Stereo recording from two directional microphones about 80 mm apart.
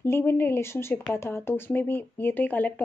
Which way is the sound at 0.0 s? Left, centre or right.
Left.